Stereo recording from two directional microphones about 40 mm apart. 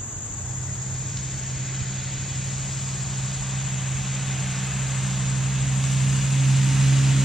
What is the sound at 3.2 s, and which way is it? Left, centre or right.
Vehicle, centre.